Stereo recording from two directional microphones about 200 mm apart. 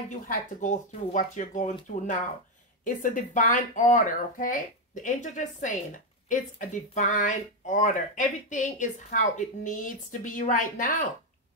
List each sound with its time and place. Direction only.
0.1 s speech: 40° left (ahead or behind)